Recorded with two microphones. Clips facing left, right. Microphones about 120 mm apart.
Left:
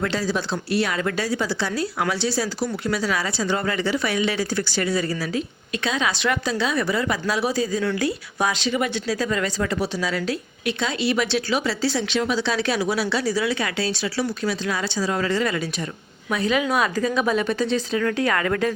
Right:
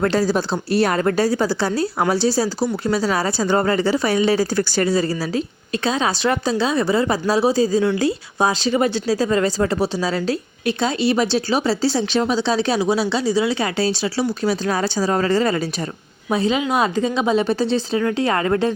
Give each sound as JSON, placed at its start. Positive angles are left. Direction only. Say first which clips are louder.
{"t": 0.0, "sound": "a woman's voice", "louder": "right 6 dB", "side_deg": -40}